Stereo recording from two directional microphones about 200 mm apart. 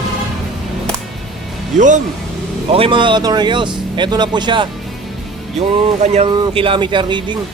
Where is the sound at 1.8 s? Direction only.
40° right (ahead or behind).